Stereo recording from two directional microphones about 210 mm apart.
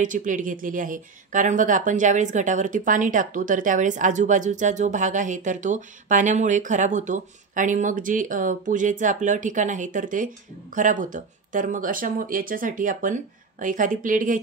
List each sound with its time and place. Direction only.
0.0 s speech: 40° right (ahead or behind)